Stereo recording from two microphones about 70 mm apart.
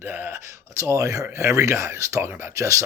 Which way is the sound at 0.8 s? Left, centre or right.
Right.